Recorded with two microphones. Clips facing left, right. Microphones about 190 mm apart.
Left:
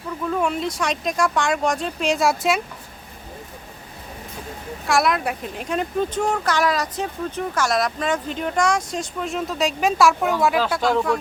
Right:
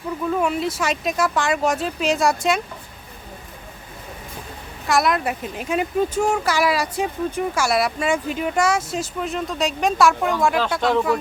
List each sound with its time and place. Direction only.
0.3 s speech: 5° right (ahead or behind)
4.9 s speech: centre (ahead or behind)